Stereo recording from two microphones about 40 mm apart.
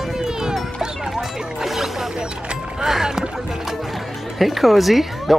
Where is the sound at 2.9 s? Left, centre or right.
Centre.